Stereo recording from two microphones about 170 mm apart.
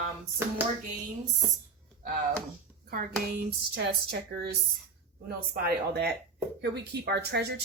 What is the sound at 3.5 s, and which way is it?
Speech, 70° right (ahead or behind).